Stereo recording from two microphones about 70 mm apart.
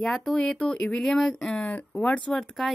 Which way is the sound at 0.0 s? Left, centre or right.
Centre.